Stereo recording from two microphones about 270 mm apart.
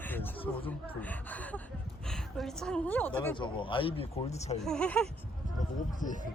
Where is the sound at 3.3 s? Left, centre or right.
Centre.